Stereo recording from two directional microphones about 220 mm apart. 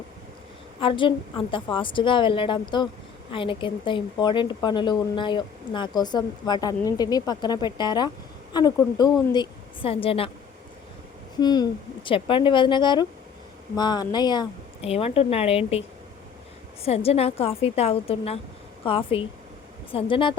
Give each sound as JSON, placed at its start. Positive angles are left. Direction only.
{"t": 0.8, "sound": "a woman's voice", "side_deg": 25}
{"t": 11.3, "sound": "a woman's voice", "side_deg": 20}
{"t": 16.8, "sound": "a woman's voice", "side_deg": 25}